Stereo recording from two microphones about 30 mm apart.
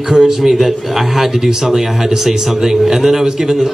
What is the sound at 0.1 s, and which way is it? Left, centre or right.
Speech, centre.